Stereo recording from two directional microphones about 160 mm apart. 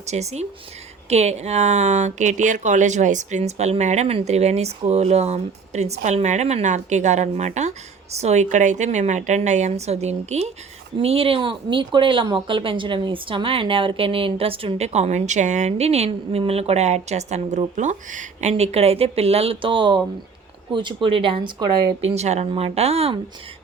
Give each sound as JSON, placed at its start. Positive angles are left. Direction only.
{"t": 0.0, "sound": "speech", "side_deg": -45}
{"t": 22.1, "sound": "speech", "side_deg": -40}